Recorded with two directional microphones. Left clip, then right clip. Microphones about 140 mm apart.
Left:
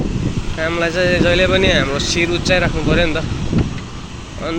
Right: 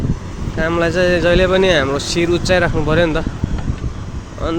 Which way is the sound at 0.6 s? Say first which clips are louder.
Right 1 dB; 35° right (ahead or behind).